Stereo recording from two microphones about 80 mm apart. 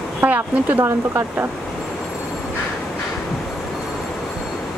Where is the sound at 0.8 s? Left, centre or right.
Right.